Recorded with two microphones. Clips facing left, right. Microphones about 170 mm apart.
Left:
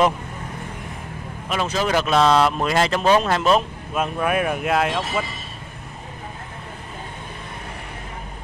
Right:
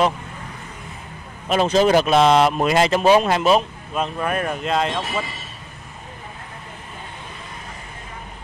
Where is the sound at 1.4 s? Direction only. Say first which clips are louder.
Right 7 dB; 30° right (ahead or behind); by 3.6 s 10° right (ahead or behind).